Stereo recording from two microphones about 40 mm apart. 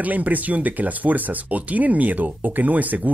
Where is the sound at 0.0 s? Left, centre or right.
Right.